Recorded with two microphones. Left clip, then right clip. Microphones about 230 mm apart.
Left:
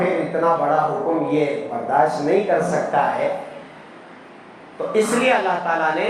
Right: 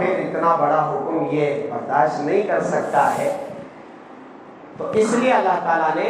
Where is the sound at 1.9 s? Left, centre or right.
Left.